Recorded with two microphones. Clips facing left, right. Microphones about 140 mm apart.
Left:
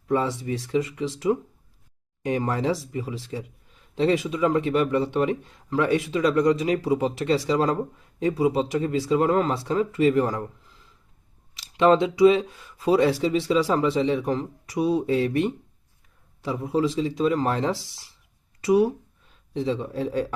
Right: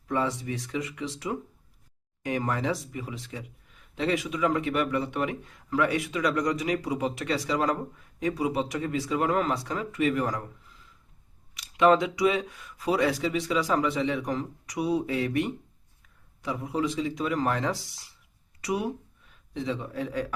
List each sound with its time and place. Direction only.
0.1 s a man's voice: 25° left (ahead or behind)
2.2 s a man's voice: 25° left (ahead or behind)
11.5 s a man's voice: 30° left (ahead or behind)